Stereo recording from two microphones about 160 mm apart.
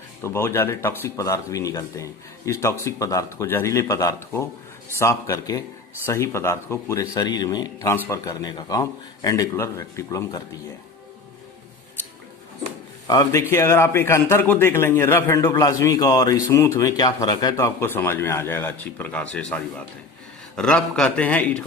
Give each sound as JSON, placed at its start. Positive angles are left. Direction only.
{"t": 0.2, "sound": "a man's voice", "side_deg": 15}
{"t": 13.1, "sound": "speech", "side_deg": 20}